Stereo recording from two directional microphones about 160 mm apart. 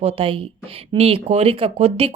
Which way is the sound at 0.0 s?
40° right (ahead or behind).